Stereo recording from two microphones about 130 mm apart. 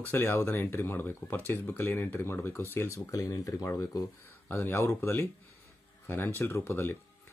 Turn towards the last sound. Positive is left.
turn(degrees=15)  # may be behind; listen again after turning